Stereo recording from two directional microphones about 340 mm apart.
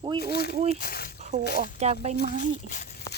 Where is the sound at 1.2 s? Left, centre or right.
Centre.